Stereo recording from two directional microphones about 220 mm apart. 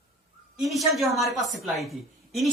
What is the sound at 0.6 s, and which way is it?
A woman's voice, centre (ahead or behind).